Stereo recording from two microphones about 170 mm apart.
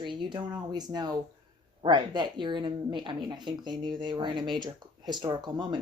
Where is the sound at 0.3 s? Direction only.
25° right (ahead or behind).